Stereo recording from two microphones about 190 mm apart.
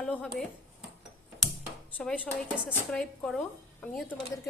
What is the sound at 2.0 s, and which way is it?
Speech, 5° left (ahead or behind).